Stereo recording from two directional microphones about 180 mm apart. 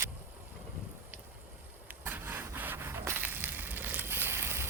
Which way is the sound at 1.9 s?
10° right (ahead or behind).